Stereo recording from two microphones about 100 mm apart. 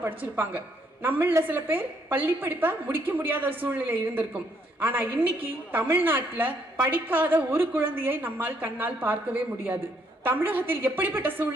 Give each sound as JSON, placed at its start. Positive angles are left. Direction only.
{"t": 1.0, "sound": "a woman's voice", "side_deg": -25}